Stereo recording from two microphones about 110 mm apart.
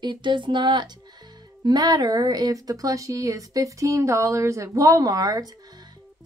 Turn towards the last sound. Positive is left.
turn(degrees=-35)  # may be behind; listen again after turning